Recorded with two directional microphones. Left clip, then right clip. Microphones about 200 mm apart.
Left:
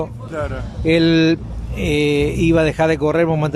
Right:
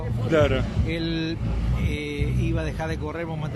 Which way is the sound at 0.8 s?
55° left (ahead or behind).